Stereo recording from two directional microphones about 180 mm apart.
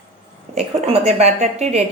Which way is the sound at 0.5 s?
35° right (ahead or behind).